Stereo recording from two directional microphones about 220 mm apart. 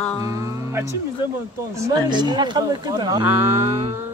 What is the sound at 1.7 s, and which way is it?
Speech, 15° right (ahead or behind).